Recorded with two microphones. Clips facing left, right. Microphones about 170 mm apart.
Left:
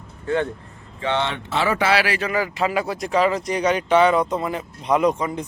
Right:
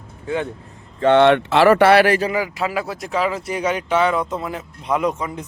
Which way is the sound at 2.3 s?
5° right (ahead or behind).